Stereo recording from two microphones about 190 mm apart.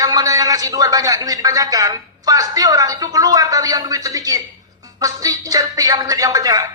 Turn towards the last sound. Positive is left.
turn(degrees=-20)  # may be behind; listen again after turning